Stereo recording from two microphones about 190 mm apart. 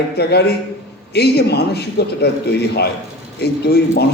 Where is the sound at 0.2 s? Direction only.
60° left (ahead or behind).